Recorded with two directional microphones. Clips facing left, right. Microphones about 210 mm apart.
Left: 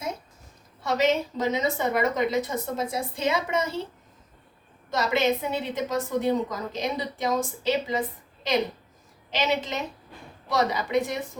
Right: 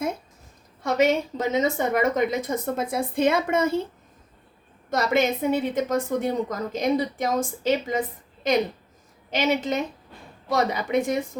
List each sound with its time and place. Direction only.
0.9 s a woman's voice: 50° right (ahead or behind)
4.9 s a woman's voice: 50° right (ahead or behind)
9.3 s a woman's voice: 50° right (ahead or behind)